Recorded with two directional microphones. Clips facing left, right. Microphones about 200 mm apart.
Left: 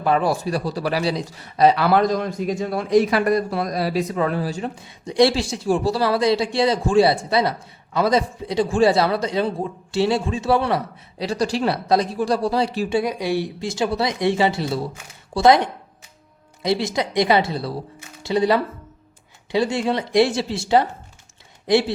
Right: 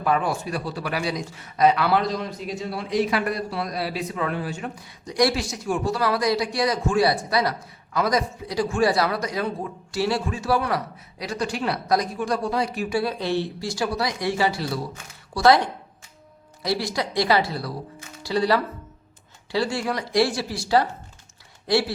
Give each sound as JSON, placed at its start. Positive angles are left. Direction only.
{"t": 0.0, "sound": "a man's voice", "side_deg": 30}
{"t": 1.9, "sound": "a man's voice", "side_deg": 45}
{"t": 13.0, "sound": "a man's voice", "side_deg": 15}